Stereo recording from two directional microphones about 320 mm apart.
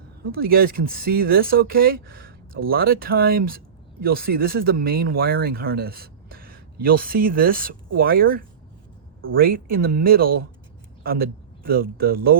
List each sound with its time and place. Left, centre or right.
0.3 s a man's voice: right